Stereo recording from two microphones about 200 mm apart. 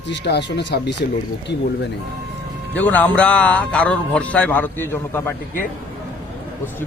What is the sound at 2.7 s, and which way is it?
Speech, 5° left (ahead or behind).